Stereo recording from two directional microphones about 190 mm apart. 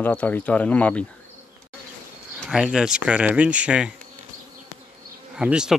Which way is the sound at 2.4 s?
5° right (ahead or behind).